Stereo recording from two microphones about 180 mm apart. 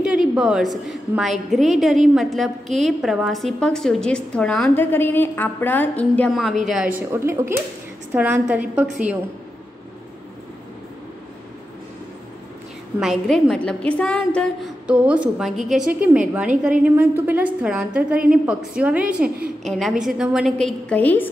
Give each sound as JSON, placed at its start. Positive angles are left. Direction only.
{"t": 0.0, "sound": "a woman's voice", "side_deg": -5}
{"t": 7.0, "sound": "a woman's voice", "side_deg": -15}
{"t": 13.0, "sound": "a woman's voice", "side_deg": 0}
{"t": 14.9, "sound": "a woman's voice", "side_deg": -5}